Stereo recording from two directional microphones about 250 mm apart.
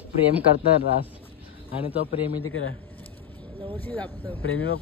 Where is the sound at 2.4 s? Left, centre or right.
Left.